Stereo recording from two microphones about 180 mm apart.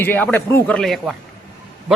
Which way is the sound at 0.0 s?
10° left (ahead or behind).